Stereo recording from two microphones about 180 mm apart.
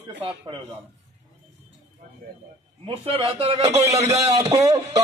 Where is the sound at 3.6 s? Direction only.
20° right (ahead or behind).